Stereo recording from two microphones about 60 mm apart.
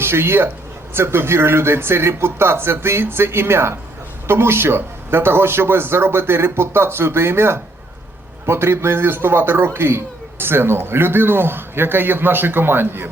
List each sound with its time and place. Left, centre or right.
0.0 s a man's voice: right